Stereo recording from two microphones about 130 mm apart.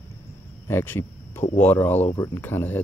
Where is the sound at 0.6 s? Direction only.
15° left (ahead or behind).